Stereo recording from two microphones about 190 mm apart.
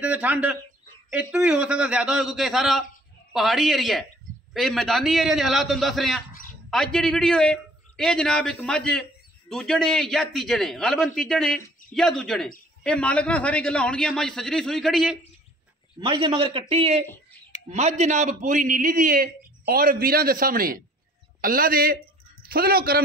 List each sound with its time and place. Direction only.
0.0 s a man's voice: 10° right (ahead or behind)
16.0 s a man's voice: 25° right (ahead or behind); by 23.0 s 50° right (ahead or behind)